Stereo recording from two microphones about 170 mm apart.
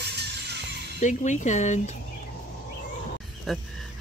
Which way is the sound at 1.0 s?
45° left (ahead or behind).